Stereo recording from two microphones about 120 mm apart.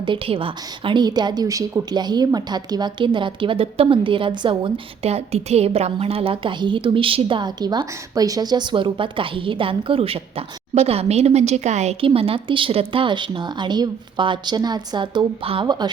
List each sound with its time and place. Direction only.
0.0 s a woman's voice: 45° right (ahead or behind)
5.0 s a woman's voice: 60° right (ahead or behind); by 15.9 s 35° right (ahead or behind)